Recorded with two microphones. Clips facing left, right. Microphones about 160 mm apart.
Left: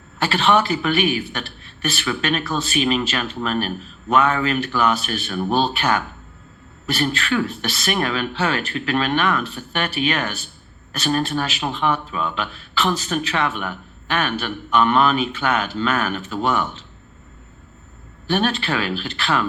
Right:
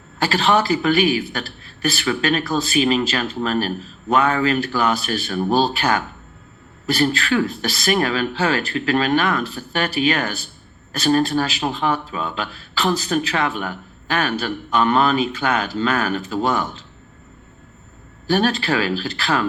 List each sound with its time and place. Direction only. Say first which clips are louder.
0.2 s speech: even; 35° right (ahead or behind)
18.3 s speech: right 2 dB; 35° right (ahead or behind)